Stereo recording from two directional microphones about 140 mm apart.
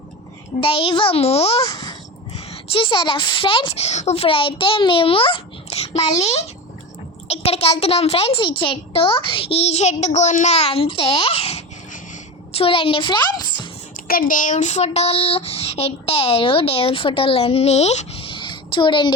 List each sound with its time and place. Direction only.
0.6 s speech: 40° left (ahead or behind)
1.6 s babbling: 25° left (ahead or behind)
2.5 s a woman's voice: 40° left (ahead or behind)
13.9 s speech: 90° left; by 19.1 s 35° left (ahead or behind)